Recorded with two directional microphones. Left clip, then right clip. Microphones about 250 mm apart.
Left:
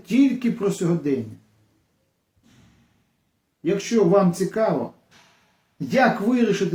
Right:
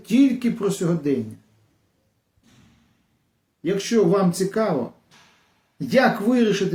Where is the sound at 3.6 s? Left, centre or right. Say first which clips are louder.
Even; centre.